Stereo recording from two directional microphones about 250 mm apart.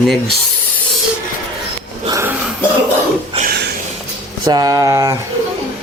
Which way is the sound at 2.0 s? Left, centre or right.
Centre.